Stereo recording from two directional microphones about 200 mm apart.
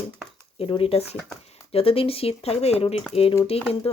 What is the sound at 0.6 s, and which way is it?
Speech, 30° left (ahead or behind).